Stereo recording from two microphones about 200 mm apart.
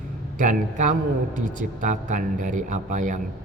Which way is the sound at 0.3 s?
40° right (ahead or behind).